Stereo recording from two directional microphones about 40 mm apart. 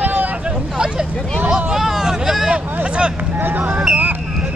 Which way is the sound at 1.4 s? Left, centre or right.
Centre.